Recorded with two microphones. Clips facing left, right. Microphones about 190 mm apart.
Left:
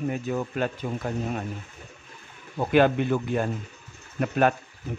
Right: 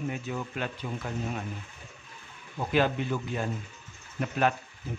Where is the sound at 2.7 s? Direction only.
55° left (ahead or behind).